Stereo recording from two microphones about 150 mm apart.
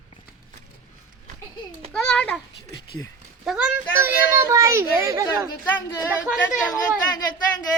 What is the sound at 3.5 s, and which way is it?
Speech, centre (ahead or behind).